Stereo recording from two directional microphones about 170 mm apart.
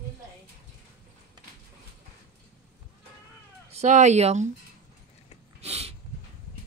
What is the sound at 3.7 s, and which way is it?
Speech, 40° right (ahead or behind).